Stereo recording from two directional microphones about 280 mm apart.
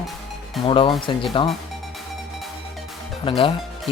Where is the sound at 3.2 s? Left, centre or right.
Centre.